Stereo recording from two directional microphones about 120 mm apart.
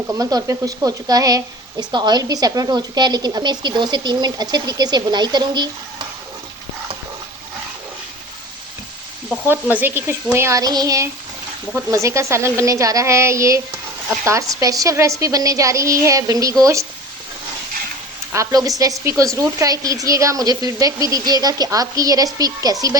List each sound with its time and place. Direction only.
0.1 s speech: 30° right (ahead or behind)
9.5 s a woman's voice: 15° right (ahead or behind)
18.3 s a woman's voice: 25° right (ahead or behind)